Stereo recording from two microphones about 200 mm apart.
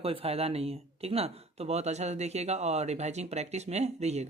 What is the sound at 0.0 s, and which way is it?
Speech, 30° right (ahead or behind).